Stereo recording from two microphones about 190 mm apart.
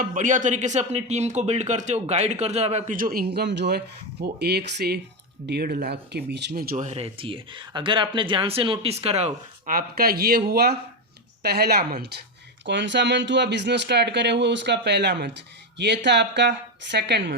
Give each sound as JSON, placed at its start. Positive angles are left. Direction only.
{"t": 0.0, "sound": "speech", "side_deg": -40}
{"t": 12.6, "sound": "speech", "side_deg": -65}